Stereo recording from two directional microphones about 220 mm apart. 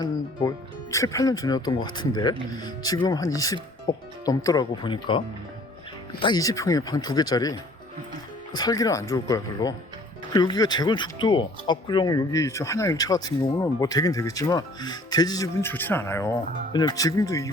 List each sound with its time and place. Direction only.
0.0 s speech: 15° left (ahead or behind)
8.5 s speech: 15° left (ahead or behind)